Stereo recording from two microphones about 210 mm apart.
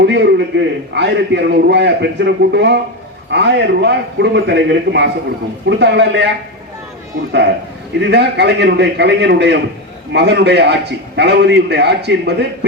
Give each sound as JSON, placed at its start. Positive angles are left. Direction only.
{"t": 0.0, "sound": "a man's voice", "side_deg": -55}